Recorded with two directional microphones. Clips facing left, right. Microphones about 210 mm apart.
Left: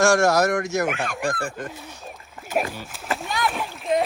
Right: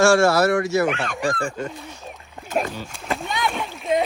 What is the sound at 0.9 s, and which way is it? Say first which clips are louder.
Speech: right 2 dB; 5° left (ahead or behind).